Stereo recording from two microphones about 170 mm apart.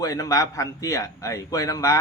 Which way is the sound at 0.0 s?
20° left (ahead or behind).